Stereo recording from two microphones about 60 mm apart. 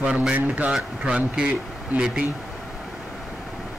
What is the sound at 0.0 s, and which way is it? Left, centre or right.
A man's voice, centre.